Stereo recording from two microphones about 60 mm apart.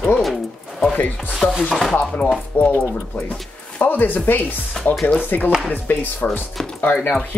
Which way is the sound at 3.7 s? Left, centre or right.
Left.